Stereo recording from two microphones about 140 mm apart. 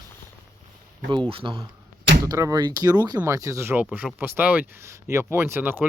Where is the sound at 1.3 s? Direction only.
40° right (ahead or behind).